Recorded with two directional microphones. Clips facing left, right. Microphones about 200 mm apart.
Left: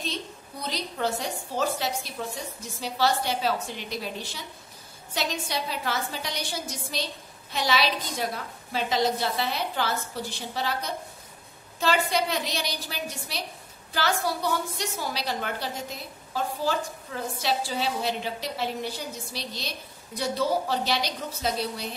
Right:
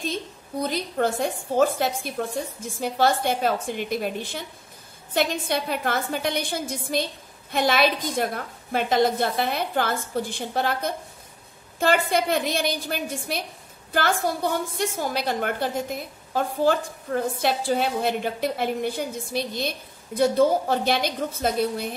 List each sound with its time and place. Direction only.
0.0 s a woman's voice: 50° right (ahead or behind)